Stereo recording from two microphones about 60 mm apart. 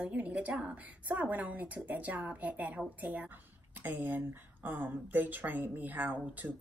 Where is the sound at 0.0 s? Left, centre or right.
Right.